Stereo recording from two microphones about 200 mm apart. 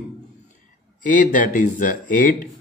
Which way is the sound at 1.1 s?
40° left (ahead or behind).